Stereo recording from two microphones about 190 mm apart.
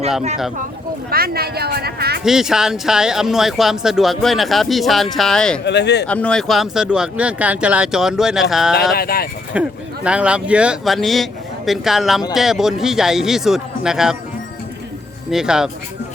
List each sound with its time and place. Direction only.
1.1 s speech: 55° right (ahead or behind)
2.2 s speech: 5° right (ahead or behind)
5.6 s speech: 65° left (ahead or behind)
6.1 s speech: 5° left (ahead or behind)
9.0 s speech: 55° left (ahead or behind)
9.6 s speech: 5° right (ahead or behind)
15.3 s speech: 5° right (ahead or behind)